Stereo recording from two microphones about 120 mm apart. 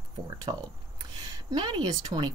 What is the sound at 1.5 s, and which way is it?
Speech, 35° right (ahead or behind).